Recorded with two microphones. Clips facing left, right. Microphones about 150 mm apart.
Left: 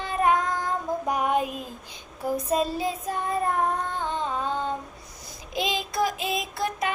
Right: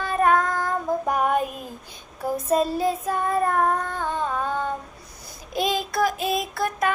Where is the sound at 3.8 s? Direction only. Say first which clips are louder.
Right 2 dB; 20° left (ahead or behind).